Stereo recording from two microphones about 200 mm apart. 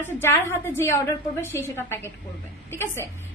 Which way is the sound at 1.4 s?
10° left (ahead or behind).